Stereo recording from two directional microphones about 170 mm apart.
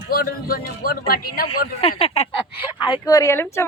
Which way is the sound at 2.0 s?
40° left (ahead or behind).